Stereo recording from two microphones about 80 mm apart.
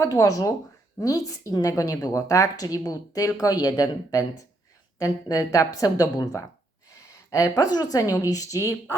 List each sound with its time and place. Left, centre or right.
0.0 s a woman's voice: left
6.9 s a sound: left
7.7 s a woman's voice: left